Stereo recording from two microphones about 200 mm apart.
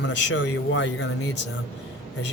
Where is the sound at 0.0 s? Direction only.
65° left (ahead or behind).